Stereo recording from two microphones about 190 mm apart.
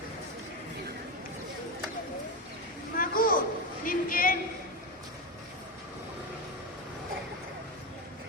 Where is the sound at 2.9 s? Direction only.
50° left (ahead or behind).